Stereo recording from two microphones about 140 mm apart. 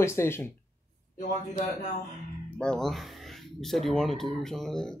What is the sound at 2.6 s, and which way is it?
Speech, 5° left (ahead or behind).